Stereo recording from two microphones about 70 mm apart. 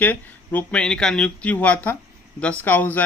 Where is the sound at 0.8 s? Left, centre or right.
Centre; by 3.0 s left.